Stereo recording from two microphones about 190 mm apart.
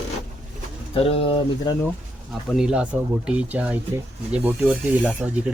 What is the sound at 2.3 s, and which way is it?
Speech, centre (ahead or behind).